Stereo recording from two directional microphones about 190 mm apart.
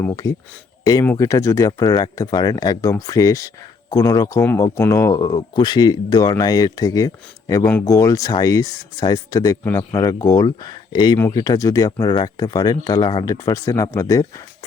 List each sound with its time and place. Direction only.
0.0 s speech: 15° left (ahead or behind)